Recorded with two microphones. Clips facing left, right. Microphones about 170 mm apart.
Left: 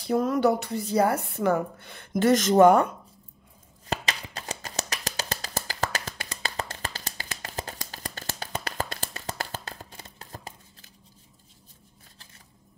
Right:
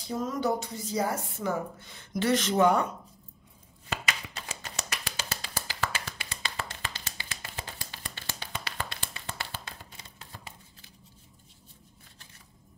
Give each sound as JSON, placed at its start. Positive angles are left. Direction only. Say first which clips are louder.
{"t": 0.0, "sound": "speech", "louder": "left 7 dB", "side_deg": 65}
{"t": 3.8, "sound": "a sound", "louder": "left 3 dB", "side_deg": 40}
{"t": 5.0, "sound": "music", "louder": "left 5 dB", "side_deg": 40}